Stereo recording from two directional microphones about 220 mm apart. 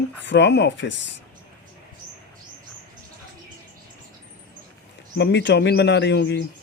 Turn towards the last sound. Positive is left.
turn(degrees=50)  # may be behind; listen again after turning